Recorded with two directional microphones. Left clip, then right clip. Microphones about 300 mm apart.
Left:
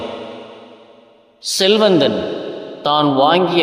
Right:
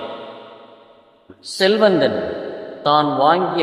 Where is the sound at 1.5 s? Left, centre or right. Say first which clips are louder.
Left 2 dB; centre.